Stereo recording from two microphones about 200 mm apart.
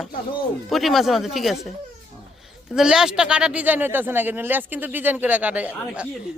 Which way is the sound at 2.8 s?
5° right (ahead or behind).